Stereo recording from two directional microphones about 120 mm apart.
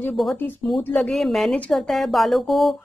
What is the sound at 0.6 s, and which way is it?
A woman's voice, 10° left (ahead or behind).